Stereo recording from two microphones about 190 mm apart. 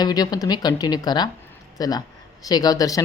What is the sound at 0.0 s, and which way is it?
Speech, 20° left (ahead or behind).